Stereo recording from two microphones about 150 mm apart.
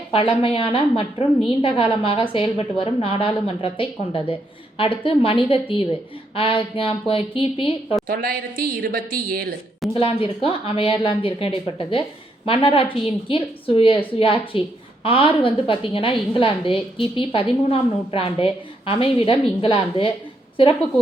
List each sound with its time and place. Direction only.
0.1 s a woman's voice: 35° left (ahead or behind)
8.0 s a woman's voice: 80° right
9.9 s a woman's voice: 35° left (ahead or behind)